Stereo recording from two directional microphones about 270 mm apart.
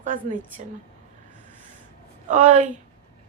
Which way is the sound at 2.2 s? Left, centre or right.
Right.